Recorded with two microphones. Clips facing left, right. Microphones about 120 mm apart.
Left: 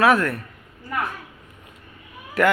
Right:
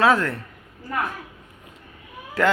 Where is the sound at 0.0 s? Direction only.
20° right (ahead or behind).